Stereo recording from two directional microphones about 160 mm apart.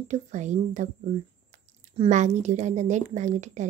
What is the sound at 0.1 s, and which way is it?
Speech, 50° right (ahead or behind).